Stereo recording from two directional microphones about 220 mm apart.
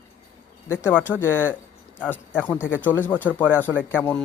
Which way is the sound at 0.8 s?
10° left (ahead or behind).